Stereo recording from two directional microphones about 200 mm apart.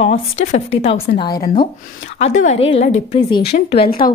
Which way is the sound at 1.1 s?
20° left (ahead or behind).